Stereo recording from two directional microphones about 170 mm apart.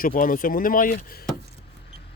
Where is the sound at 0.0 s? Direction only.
55° left (ahead or behind).